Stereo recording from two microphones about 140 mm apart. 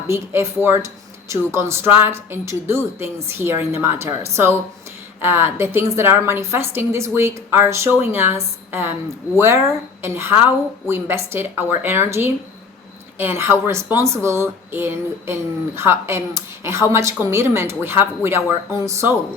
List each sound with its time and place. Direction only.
0.1 s a woman's voice: 15° right (ahead or behind)